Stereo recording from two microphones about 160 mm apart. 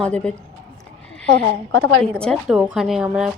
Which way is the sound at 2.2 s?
Centre (ahead or behind).